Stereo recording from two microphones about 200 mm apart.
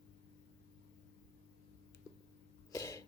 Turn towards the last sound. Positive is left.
turn(degrees=15)  # may be behind; listen again after turning